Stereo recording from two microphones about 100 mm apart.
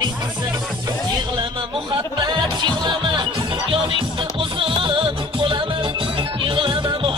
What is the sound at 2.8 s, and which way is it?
Music, 50° right (ahead or behind).